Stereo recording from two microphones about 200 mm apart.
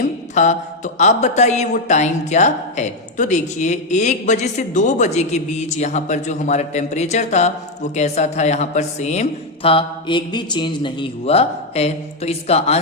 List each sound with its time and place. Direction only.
0.4 s speech: 35° left (ahead or behind)